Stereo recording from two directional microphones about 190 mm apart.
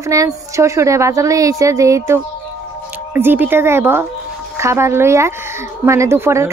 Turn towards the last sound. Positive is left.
turn(degrees=-15)  # may be behind; listen again after turning